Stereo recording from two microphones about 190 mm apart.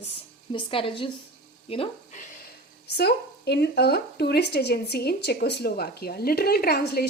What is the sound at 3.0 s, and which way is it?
Speech, 60° left (ahead or behind).